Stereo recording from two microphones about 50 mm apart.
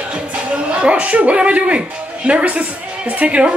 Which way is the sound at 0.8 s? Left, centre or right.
Right.